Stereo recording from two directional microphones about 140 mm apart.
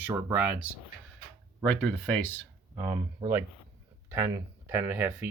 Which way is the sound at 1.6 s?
10° left (ahead or behind).